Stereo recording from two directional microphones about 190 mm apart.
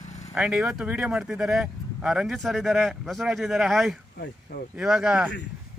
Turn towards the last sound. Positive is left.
turn(degrees=-5)  # may be behind; listen again after turning